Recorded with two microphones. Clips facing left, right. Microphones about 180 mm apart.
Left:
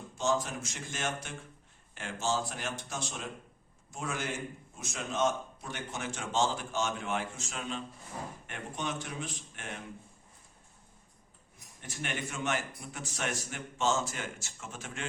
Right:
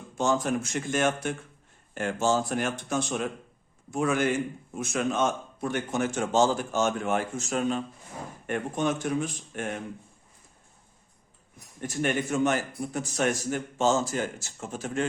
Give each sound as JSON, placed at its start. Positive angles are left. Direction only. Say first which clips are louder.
{"t": 0.2, "sound": "a man's voice", "louder": "right 6 dB", "side_deg": -55}
{"t": 11.8, "sound": "a man's voice", "louder": "right 11 dB", "side_deg": -45}